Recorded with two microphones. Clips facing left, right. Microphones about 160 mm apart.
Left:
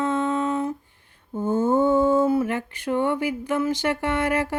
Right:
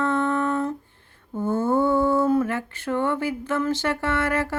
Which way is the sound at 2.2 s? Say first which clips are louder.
Even; 10° left (ahead or behind).